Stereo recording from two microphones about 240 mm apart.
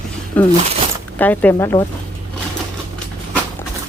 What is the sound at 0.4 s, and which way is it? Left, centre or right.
Speech, centre.